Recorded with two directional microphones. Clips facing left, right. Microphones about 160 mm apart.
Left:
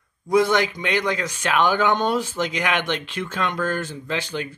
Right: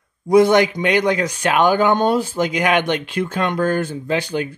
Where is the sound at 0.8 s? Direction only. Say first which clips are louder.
Right 6 dB; 55° right (ahead or behind).